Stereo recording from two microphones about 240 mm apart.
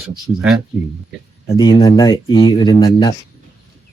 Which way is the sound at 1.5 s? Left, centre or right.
Centre.